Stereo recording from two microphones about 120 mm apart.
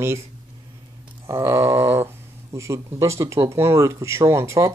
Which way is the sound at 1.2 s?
25° right (ahead or behind).